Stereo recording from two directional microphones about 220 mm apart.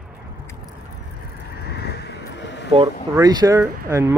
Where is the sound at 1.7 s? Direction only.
45° left (ahead or behind).